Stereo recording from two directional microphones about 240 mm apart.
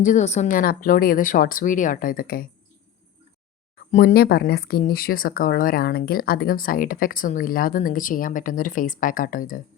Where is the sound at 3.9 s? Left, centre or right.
Left.